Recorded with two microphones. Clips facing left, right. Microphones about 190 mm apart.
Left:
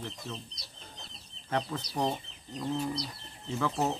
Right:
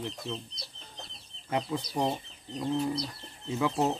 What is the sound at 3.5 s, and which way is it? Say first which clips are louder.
Speech: right 2 dB; 15° right (ahead or behind).